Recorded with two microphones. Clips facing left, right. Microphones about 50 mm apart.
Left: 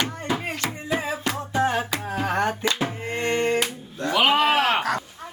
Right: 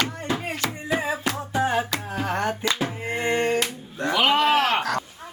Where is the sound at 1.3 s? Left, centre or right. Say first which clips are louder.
Left 2 dB; centre.